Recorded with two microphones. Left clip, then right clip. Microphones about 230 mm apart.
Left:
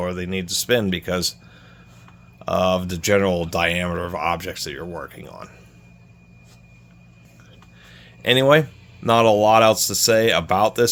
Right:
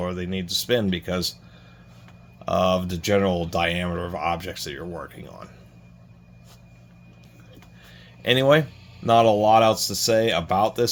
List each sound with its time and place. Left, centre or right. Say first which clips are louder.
0.0 s speech: left 3 dB; left
2.4 s speech: left 2 dB; left
7.9 s a sound: left 3 dB; left
9.0 s speech: left 2 dB; left